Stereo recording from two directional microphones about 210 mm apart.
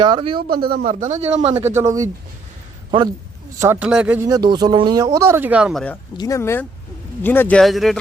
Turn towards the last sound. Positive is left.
turn(degrees=0)  # may be behind; listen again after turning